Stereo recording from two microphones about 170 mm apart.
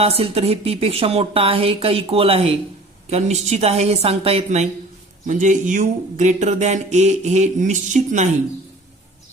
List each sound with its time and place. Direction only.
0.0 s speech: 35° right (ahead or behind)